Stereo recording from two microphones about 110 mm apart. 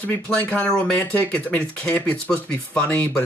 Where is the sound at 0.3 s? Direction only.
10° left (ahead or behind).